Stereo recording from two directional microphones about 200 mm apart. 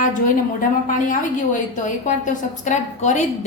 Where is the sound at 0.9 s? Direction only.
40° left (ahead or behind).